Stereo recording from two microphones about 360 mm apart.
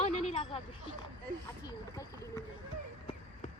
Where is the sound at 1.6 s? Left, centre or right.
Centre.